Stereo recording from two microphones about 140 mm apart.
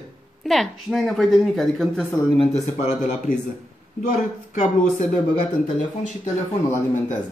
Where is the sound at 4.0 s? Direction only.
60° left (ahead or behind).